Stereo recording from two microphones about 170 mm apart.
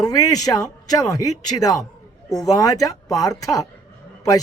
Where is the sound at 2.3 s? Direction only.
20° left (ahead or behind).